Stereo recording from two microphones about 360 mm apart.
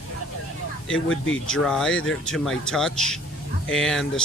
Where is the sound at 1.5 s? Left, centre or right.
Centre.